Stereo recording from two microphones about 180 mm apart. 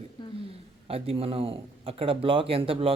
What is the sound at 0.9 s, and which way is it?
Speech, 35° right (ahead or behind).